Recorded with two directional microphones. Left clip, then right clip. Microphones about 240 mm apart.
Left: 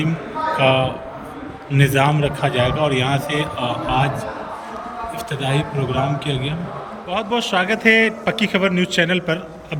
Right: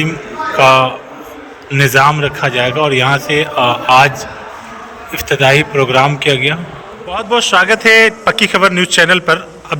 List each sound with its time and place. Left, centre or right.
0.5 s a man's voice: centre
5.4 s a man's voice: centre
5.7 s a man's voice: right
6.2 s a man's voice: centre